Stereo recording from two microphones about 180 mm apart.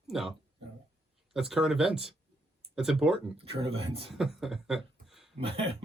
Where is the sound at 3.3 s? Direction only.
30° right (ahead or behind).